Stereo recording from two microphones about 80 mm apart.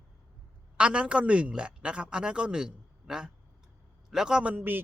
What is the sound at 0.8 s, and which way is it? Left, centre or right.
Speech, centre.